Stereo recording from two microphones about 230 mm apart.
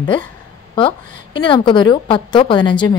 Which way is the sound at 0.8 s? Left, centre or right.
Left.